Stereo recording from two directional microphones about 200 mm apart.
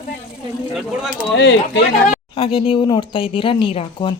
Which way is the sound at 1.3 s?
55° left (ahead or behind).